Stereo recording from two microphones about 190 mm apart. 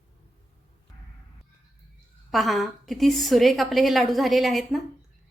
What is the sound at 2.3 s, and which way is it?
A woman's voice, centre (ahead or behind).